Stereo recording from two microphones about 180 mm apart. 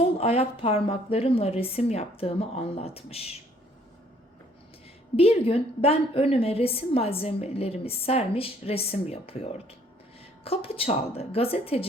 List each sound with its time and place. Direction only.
0.0 s a woman's voice: 35° left (ahead or behind)
5.1 s a woman's voice: 35° left (ahead or behind)